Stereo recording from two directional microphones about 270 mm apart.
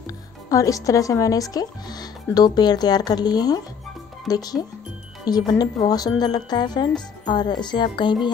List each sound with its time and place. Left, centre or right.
0.0 s speech: centre